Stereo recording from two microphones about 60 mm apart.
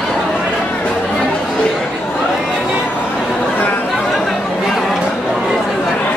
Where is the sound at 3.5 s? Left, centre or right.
Left.